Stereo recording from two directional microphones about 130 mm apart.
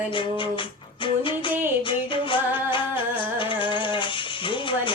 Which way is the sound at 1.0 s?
40° left (ahead or behind).